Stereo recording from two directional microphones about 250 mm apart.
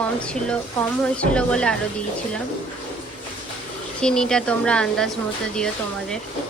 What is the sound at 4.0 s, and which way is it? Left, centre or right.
A woman's voice, centre.